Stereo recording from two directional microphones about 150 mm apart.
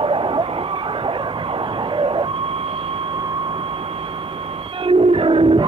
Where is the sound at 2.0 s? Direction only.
35° right (ahead or behind).